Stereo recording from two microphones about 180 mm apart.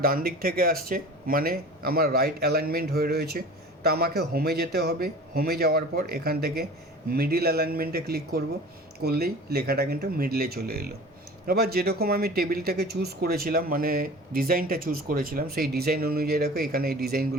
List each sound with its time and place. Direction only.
0.0 s speech: 55° right (ahead or behind)